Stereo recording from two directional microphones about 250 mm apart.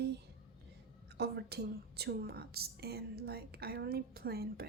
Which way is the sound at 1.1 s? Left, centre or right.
Right.